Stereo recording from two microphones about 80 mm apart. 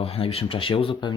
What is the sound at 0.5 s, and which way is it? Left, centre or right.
Speech, left.